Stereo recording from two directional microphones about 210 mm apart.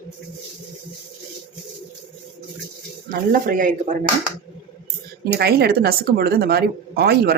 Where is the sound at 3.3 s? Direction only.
40° right (ahead or behind).